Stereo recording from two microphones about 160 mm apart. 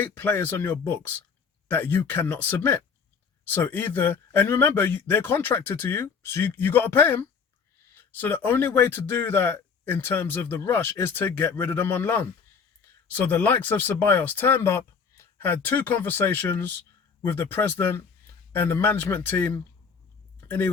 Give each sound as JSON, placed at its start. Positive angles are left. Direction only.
{"t": 0.0, "sound": "a man's voice", "side_deg": 10}